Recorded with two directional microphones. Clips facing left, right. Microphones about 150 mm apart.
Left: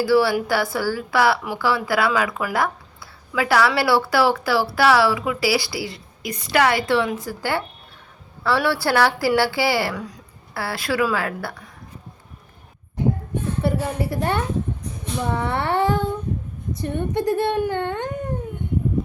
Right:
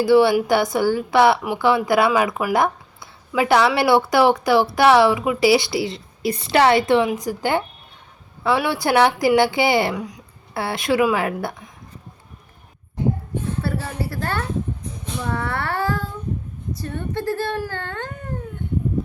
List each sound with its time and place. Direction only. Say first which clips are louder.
0.0 s a woman's voice: right 3 dB; 20° right (ahead or behind)
13.6 s a woman's voice: left 6 dB; 20° left (ahead or behind)